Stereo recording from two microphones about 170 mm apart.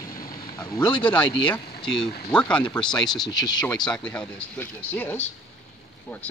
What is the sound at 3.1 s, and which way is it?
Speech, 25° left (ahead or behind).